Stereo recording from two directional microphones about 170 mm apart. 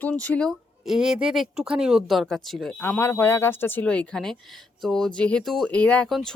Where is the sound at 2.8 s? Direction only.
15° left (ahead or behind).